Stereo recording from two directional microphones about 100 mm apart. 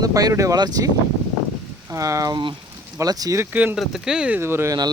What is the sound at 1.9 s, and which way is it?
Speech, 30° right (ahead or behind).